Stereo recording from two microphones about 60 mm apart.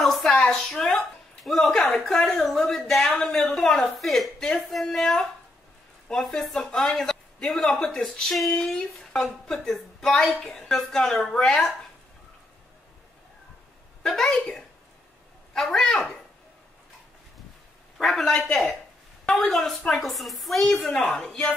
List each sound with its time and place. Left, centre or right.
0.0 s a sound: centre
0.5 s speech: centre
6.2 s speech: centre
14.0 s a woman's voice: centre
17.9 s a man's voice: centre
20.8 s a woman's voice: centre